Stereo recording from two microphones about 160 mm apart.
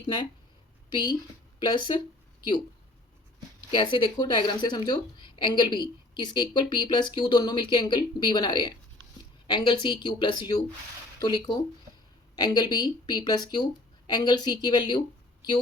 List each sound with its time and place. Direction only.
0.0 s a woman's voice: 30° left (ahead or behind)
3.7 s a woman's voice: 30° left (ahead or behind)